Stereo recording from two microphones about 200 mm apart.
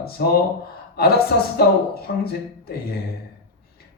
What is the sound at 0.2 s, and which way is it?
Music, 50° left (ahead or behind).